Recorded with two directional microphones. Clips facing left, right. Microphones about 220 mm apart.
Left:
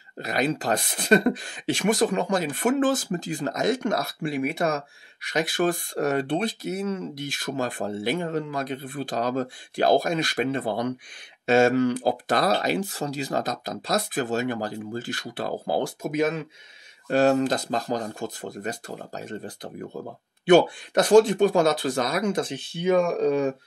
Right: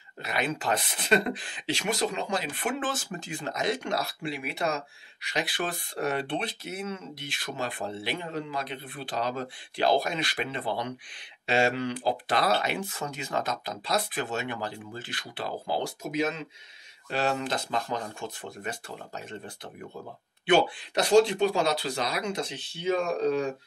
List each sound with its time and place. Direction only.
0.2 s speech: 40° left (ahead or behind); by 16.4 s 55° left (ahead or behind)
17.1 s speech: 40° left (ahead or behind)